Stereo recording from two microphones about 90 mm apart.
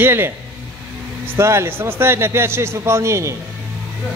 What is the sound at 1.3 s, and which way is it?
A man's voice, 30° right (ahead or behind).